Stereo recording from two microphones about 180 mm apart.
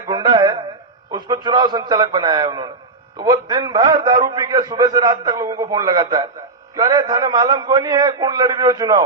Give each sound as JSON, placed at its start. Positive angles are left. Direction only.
{"t": 0.1, "sound": "music", "side_deg": -25}
{"t": 1.1, "sound": "a man's voice", "side_deg": -25}